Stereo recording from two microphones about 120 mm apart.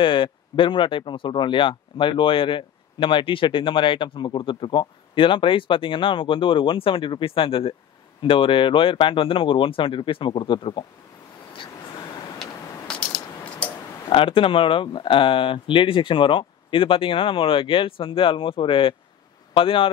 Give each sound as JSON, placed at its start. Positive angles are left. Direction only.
{"t": 0.0, "sound": "speech", "side_deg": 45}
{"t": 12.4, "sound": "a sound", "side_deg": 5}
{"t": 14.0, "sound": "speech", "side_deg": 45}